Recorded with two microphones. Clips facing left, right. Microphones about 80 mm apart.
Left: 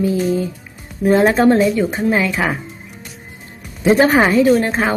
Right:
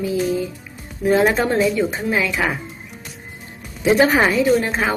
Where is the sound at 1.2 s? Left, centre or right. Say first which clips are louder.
Left 5 dB; centre.